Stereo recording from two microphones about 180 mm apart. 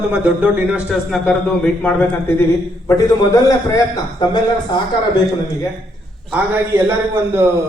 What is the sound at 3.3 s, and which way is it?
Speech, 20° left (ahead or behind).